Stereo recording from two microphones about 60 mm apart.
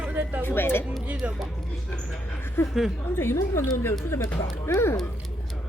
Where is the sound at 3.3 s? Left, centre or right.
Left.